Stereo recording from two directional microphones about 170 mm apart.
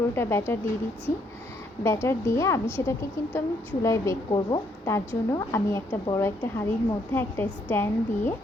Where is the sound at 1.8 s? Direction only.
15° left (ahead or behind).